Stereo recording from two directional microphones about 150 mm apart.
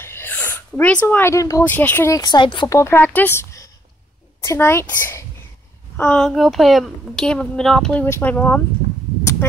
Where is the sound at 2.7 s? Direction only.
15° left (ahead or behind).